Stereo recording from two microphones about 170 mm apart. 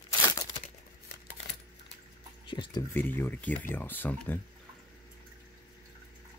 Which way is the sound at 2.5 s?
25° left (ahead or behind).